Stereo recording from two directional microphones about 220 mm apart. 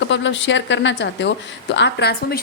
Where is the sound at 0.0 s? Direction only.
55° left (ahead or behind).